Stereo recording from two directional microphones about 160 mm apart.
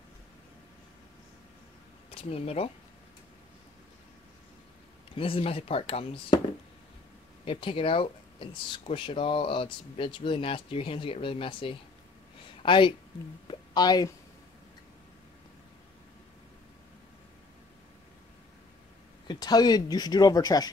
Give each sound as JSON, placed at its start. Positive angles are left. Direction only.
{"t": 2.0, "sound": "speech", "side_deg": 40}
{"t": 5.1, "sound": "speech", "side_deg": 35}
{"t": 7.4, "sound": "a woman's voice", "side_deg": 35}
{"t": 19.2, "sound": "speech", "side_deg": 25}